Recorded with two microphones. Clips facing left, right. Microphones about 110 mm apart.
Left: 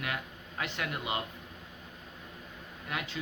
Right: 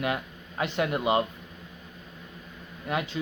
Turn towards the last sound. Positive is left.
turn(degrees=-25)  # may be behind; listen again after turning